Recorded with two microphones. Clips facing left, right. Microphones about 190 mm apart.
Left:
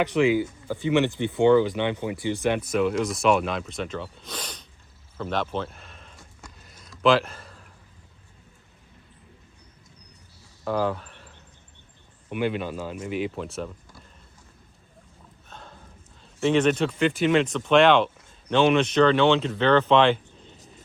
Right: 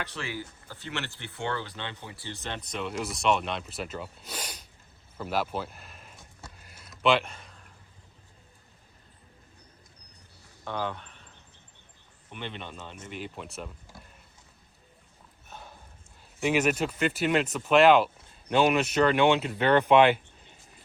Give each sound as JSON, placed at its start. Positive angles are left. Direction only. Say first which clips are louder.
{"t": 0.0, "sound": "speech", "louder": "left 16 dB", "side_deg": 15}
{"t": 5.1, "sound": "a sound", "louder": "left 3 dB", "side_deg": -5}
{"t": 10.7, "sound": "speech", "louder": "left 8 dB", "side_deg": 0}
{"t": 15.4, "sound": "sniff", "louder": "left 1 dB", "side_deg": -10}
{"t": 16.4, "sound": "speech", "louder": "left 5 dB", "side_deg": -10}